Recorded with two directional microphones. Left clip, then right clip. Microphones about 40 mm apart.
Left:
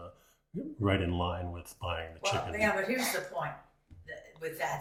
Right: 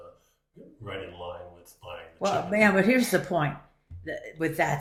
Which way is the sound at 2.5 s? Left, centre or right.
Right.